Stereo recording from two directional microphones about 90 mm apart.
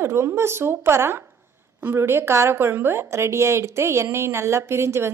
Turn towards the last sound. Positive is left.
turn(degrees=-30)  # may be behind; listen again after turning